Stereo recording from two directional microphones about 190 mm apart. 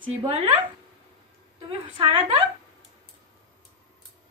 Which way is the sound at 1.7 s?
25° right (ahead or behind).